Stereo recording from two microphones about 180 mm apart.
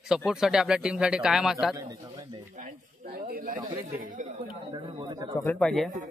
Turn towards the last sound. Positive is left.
turn(degrees=5)  # may be behind; listen again after turning